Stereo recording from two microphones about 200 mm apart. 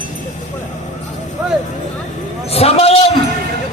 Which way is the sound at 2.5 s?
30° left (ahead or behind).